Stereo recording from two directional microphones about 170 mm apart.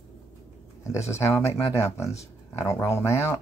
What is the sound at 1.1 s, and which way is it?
Speech, 15° left (ahead or behind).